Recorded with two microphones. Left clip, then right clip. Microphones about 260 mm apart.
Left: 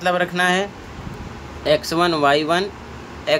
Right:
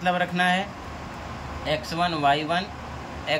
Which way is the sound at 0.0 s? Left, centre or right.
Centre.